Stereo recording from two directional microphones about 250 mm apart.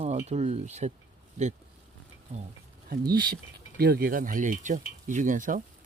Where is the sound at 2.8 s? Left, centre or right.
Right.